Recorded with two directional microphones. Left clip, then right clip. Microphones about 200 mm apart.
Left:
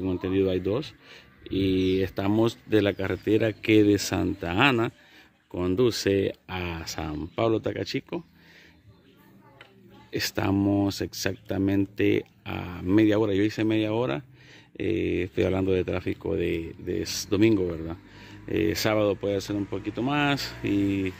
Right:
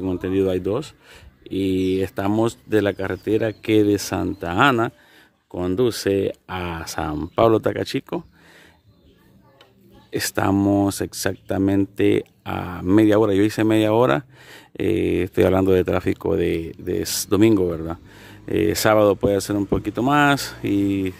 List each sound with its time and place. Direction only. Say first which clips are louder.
0.0 s speech: right 4 dB; 15° right (ahead or behind)
10.1 s speech: right 6 dB; 20° right (ahead or behind)